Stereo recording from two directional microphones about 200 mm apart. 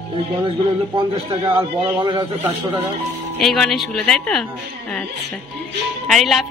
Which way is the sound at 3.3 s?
Centre (ahead or behind).